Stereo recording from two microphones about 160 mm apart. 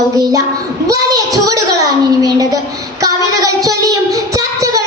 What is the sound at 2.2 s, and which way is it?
Speech, 20° right (ahead or behind).